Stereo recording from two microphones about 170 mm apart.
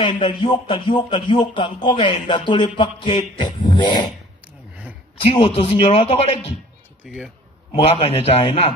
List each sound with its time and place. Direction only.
0.0 s speech: 30° left (ahead or behind)
5.3 s speech: 35° left (ahead or behind)
7.7 s speech: 35° left (ahead or behind)